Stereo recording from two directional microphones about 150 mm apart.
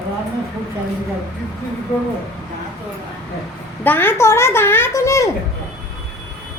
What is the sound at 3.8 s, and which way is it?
A woman's voice, 15° left (ahead or behind).